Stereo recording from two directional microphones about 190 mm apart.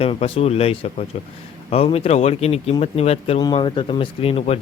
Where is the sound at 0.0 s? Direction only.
30° left (ahead or behind).